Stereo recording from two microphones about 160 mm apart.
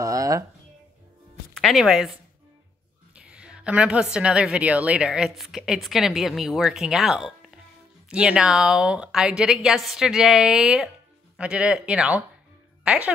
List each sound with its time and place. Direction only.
0.0 s music: 20° right (ahead or behind)
1.6 s a woman's voice: centre (ahead or behind)
3.3 s a woman's voice: 5° right (ahead or behind)